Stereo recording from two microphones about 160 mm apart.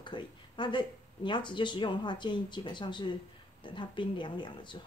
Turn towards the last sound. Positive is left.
turn(degrees=30)  # may be behind; listen again after turning